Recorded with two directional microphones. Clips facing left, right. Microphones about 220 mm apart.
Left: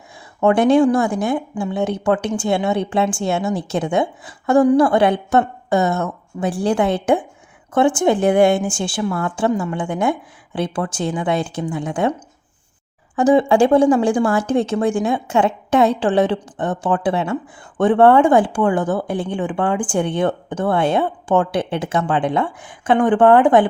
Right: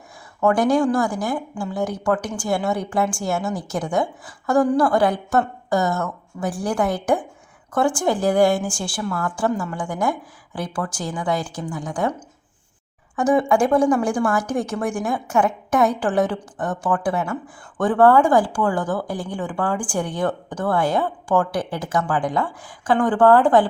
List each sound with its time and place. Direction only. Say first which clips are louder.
0.3 s speech: left 4 dB; 25° left (ahead or behind)
13.1 s speech: left 4 dB; 30° left (ahead or behind)